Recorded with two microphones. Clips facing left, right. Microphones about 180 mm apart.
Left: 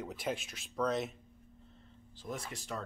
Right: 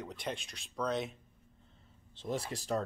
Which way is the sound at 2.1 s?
30° right (ahead or behind).